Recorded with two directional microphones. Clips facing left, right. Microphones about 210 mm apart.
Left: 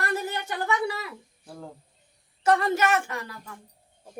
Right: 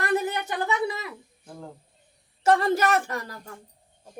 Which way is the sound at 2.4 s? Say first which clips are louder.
Right 1 dB; 30° right (ahead or behind).